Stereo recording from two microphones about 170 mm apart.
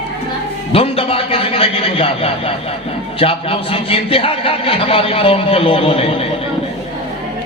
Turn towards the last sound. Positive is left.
turn(degrees=35)  # may be behind; listen again after turning